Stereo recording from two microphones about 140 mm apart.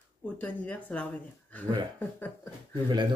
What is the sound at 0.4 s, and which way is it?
A woman's voice, 10° left (ahead or behind).